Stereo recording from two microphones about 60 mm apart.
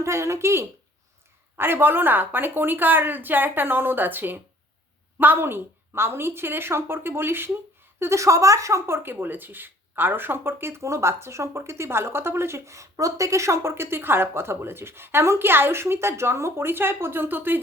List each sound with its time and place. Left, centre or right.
0.0 s speech: right
1.5 s a woman's voice: right
7.9 s a woman's voice: right
9.0 s speech: right